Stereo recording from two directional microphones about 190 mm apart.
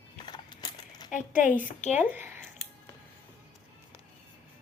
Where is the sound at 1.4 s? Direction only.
40° left (ahead or behind).